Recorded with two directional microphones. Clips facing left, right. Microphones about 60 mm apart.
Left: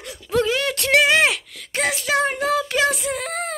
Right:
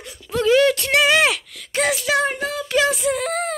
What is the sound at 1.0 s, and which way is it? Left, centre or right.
Speech, left.